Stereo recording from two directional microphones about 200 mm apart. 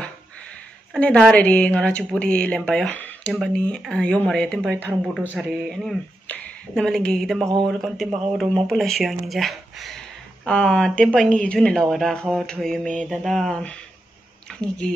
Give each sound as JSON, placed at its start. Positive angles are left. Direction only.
{"t": 0.9, "sound": "speech", "side_deg": 5}